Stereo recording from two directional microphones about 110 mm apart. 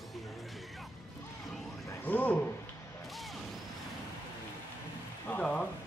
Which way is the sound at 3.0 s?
Centre (ahead or behind).